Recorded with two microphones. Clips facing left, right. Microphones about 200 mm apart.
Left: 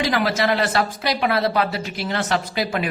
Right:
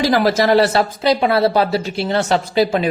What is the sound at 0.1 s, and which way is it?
Speech, 40° right (ahead or behind).